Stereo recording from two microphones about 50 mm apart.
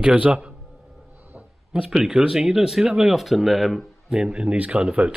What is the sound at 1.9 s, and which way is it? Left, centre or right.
Speech, centre.